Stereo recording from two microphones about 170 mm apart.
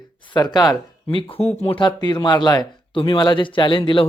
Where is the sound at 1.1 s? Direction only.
35° left (ahead or behind).